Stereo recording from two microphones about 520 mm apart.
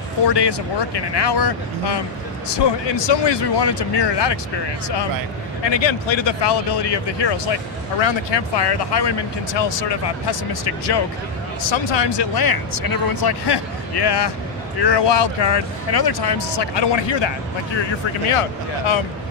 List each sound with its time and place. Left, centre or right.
0.3 s speech: left
5.6 s speech: left
17.7 s speech: left